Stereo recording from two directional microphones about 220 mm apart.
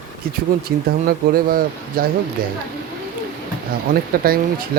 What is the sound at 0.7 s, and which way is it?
Speech, 45° right (ahead or behind).